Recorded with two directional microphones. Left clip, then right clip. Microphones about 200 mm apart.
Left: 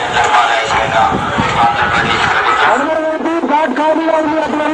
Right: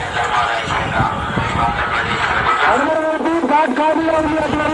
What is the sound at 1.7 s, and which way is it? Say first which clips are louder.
Vehicle: left 6 dB; 55° left (ahead or behind).